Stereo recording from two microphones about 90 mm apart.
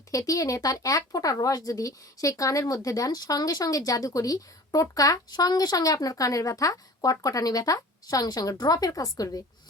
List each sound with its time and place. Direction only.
0.1 s speech: 40° left (ahead or behind)